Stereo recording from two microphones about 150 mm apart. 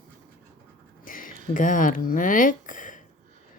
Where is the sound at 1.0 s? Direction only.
65° left (ahead or behind).